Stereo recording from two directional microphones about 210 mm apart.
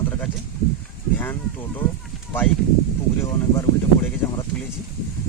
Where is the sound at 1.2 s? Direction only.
10° left (ahead or behind).